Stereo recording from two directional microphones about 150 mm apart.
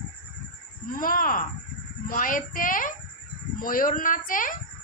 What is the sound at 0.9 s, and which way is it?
A child's voice, 70° left (ahead or behind).